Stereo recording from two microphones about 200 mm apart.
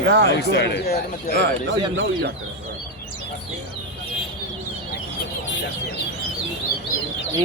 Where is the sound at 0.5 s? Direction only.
55° left (ahead or behind).